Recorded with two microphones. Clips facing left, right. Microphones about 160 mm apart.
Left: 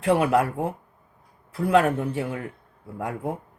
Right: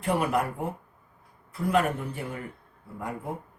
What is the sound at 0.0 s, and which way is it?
Speech, 90° left.